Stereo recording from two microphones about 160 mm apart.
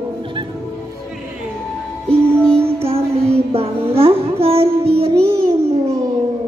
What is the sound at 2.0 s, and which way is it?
Music, 5° left (ahead or behind).